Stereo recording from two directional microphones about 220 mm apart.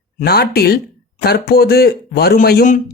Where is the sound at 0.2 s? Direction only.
45° left (ahead or behind).